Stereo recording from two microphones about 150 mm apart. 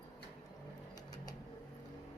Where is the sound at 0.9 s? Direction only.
25° left (ahead or behind).